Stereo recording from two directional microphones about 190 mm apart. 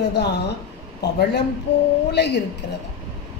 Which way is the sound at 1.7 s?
65° left (ahead or behind).